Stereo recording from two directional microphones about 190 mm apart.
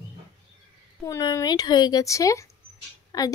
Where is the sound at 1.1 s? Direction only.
15° left (ahead or behind).